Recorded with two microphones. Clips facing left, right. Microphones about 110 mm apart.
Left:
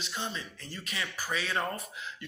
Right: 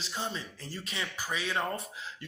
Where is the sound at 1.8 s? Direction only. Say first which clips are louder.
Even; 30° right (ahead or behind).